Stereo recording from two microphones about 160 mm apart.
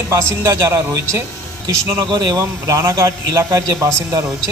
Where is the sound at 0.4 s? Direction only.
15° right (ahead or behind).